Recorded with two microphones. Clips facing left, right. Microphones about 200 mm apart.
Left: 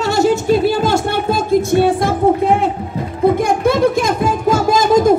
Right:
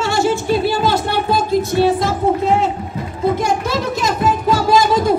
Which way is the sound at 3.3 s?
55° left (ahead or behind).